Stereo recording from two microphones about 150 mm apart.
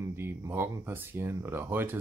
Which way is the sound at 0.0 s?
15° right (ahead or behind).